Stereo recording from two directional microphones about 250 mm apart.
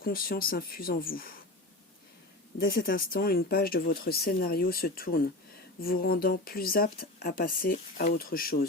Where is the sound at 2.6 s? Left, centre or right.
Left.